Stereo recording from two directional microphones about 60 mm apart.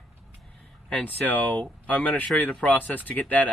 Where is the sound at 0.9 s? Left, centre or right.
Left.